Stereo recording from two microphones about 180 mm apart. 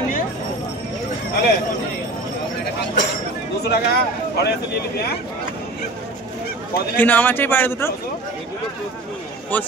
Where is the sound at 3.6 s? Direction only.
65° left (ahead or behind).